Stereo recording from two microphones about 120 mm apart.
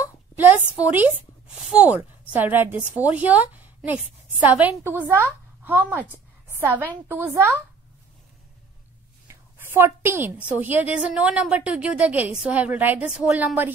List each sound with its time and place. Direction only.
0.7 s a woman's voice: 10° right (ahead or behind)
9.3 s a woman's voice: 20° right (ahead or behind)